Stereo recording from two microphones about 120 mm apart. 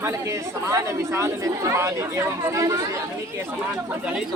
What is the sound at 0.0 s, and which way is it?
Speech, 25° right (ahead or behind).